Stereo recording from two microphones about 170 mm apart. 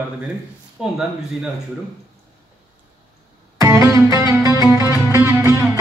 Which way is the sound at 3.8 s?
15° right (ahead or behind).